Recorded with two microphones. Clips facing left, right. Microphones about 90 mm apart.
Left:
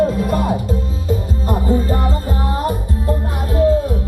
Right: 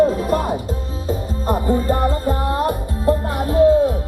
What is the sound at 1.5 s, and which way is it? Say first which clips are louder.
Music: even; 45° right (ahead or behind).